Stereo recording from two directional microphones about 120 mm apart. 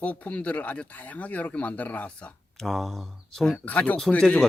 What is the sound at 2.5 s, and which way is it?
Speech, centre (ahead or behind).